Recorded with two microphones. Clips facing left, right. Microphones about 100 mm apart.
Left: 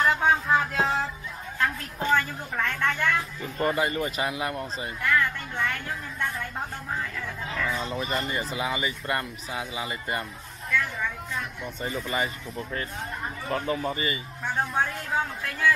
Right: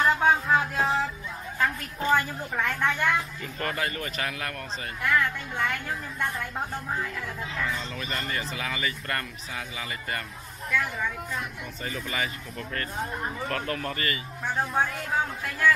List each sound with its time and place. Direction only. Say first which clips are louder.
0.0 s music: even; centre (ahead or behind)
2.0 s speech: even; 10° right (ahead or behind)
3.5 s speech: left 5 dB; 15° left (ahead or behind)
5.0 s a woman's voice: even; 5° right (ahead or behind)
7.8 s speech: left 5 dB; 15° left (ahead or behind)
10.7 s speech: even; 10° right (ahead or behind)
11.9 s a woman's voice: left 2 dB; 5° left (ahead or behind)